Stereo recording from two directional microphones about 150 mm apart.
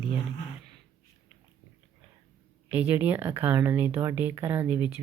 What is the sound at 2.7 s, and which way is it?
Speech, 10° right (ahead or behind).